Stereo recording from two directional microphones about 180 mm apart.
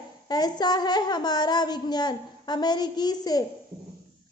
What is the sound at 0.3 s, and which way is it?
A woman's voice, 20° left (ahead or behind).